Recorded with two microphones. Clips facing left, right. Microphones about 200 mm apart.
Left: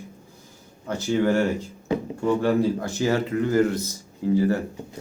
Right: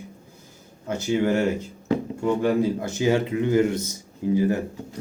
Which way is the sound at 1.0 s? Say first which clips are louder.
Even; 15° right (ahead or behind).